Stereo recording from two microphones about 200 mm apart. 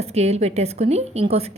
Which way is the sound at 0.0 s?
30° right (ahead or behind).